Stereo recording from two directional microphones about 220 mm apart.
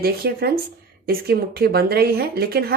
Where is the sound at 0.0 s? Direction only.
45° right (ahead or behind).